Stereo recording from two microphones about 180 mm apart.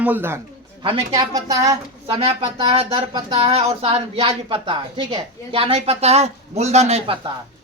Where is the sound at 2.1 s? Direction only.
35° right (ahead or behind).